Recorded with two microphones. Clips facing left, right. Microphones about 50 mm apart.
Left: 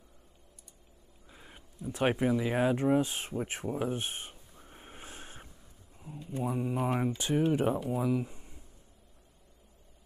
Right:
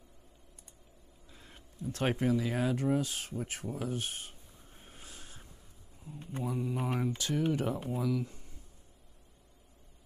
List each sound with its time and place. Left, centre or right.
1.3 s a sound: centre; by 5.5 s left
6.4 s speech: left
7.2 s speech: left